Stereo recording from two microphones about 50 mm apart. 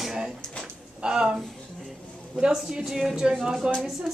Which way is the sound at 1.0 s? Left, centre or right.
Centre.